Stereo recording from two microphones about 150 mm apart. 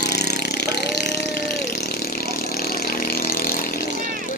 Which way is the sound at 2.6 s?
80° left.